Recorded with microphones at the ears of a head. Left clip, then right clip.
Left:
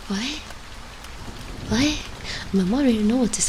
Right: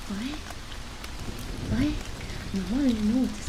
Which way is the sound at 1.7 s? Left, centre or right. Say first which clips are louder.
Left 7 dB; left.